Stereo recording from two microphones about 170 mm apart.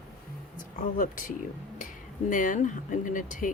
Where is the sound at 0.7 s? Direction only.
50° left (ahead or behind).